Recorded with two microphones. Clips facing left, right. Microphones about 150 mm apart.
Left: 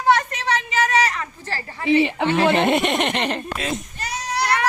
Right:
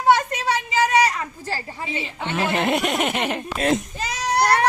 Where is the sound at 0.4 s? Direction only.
10° right (ahead or behind).